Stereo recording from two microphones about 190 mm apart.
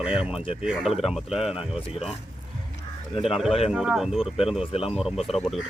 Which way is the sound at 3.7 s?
5° right (ahead or behind).